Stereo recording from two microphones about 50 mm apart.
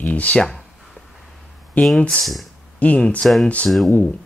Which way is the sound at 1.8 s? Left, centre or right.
Left.